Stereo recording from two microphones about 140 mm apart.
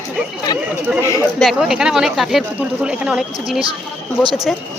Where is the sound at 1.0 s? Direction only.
20° left (ahead or behind).